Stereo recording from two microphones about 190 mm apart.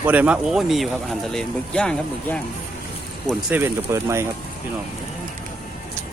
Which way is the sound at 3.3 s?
5° right (ahead or behind).